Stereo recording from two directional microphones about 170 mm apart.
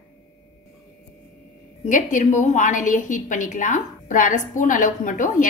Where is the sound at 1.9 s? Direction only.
45° left (ahead or behind).